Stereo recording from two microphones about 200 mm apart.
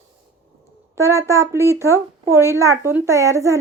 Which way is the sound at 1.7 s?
15° right (ahead or behind).